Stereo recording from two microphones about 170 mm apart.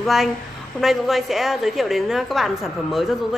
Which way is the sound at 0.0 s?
Centre (ahead or behind).